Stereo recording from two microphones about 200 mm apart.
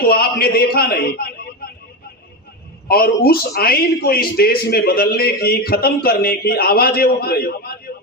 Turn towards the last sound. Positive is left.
turn(degrees=50)  # may be behind; listen again after turning